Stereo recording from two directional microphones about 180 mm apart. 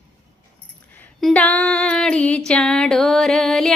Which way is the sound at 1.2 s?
5° left (ahead or behind).